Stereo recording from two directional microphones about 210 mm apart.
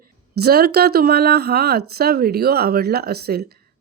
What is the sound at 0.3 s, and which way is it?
Speech, 50° right (ahead or behind).